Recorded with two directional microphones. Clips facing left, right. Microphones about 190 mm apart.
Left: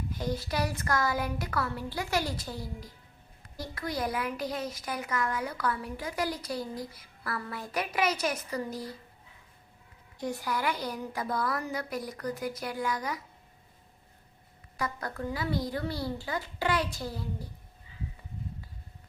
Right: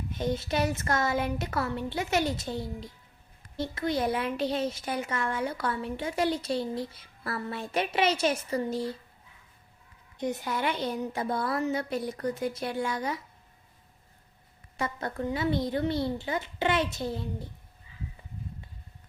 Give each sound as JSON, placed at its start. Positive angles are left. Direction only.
{"t": 0.1, "sound": "speech", "side_deg": -25}
{"t": 10.2, "sound": "speech", "side_deg": -20}
{"t": 14.8, "sound": "speech", "side_deg": -25}